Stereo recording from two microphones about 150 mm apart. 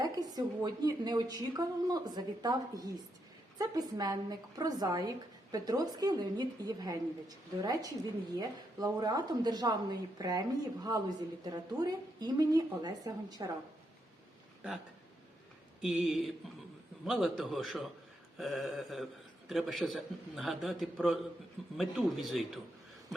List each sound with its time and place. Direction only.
0.0 s a woman's voice: 25° right (ahead or behind)
15.8 s a man's voice: 5° right (ahead or behind)